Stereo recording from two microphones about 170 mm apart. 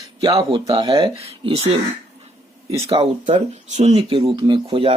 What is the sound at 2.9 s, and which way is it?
Speech, 35° right (ahead or behind).